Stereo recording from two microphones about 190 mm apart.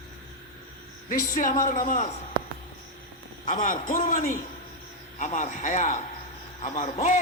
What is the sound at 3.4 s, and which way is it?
A man's voice, 45° left (ahead or behind).